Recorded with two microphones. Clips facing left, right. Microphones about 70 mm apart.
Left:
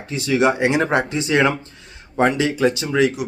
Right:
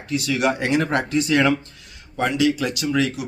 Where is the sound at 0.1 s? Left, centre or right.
Left.